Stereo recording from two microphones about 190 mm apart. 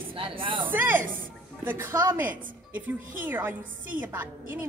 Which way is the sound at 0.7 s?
10° right (ahead or behind).